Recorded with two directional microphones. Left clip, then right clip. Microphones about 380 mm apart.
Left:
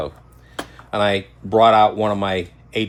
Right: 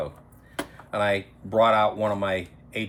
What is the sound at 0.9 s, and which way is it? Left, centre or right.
Speech, centre.